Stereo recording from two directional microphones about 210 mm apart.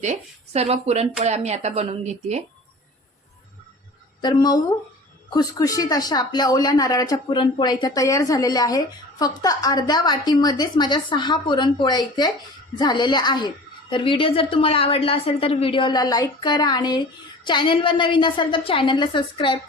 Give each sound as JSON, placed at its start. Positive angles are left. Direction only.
{"t": 0.0, "sound": "speech", "side_deg": -30}
{"t": 4.2, "sound": "speech", "side_deg": 20}